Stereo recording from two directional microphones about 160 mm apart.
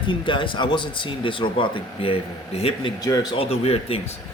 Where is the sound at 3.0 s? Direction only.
25° left (ahead or behind); by 4.0 s 40° left (ahead or behind).